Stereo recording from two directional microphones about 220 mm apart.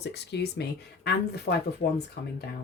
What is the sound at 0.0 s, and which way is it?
Speech, 50° left (ahead or behind).